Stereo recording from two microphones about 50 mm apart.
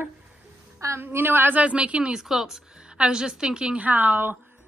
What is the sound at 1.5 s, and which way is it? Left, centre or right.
Speech, right.